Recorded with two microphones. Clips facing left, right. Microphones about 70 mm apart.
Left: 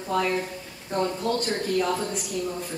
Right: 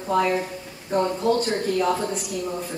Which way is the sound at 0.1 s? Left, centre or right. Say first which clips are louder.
Right 4 dB; centre.